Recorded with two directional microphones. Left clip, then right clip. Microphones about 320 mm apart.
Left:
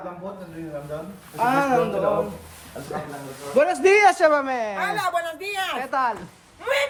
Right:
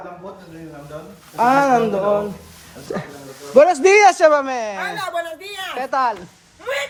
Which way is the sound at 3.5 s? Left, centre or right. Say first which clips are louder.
Right 6 dB; centre.